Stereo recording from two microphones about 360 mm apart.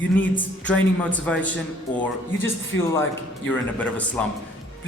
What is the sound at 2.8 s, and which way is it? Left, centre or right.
A man's voice, centre.